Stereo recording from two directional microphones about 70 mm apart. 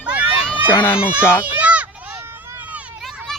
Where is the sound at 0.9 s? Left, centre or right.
Right.